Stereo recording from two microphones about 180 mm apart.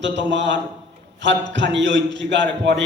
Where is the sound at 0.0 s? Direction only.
85° right.